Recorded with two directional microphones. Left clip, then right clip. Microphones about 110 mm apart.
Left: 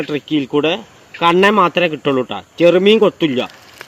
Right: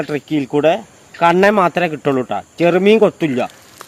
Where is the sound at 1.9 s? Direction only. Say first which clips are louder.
Even; 40° right (ahead or behind).